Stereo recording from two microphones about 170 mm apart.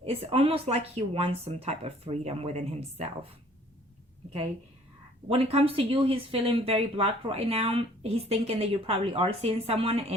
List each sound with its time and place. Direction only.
0.0 s speech: 35° right (ahead or behind)
5.3 s speech: 35° right (ahead or behind)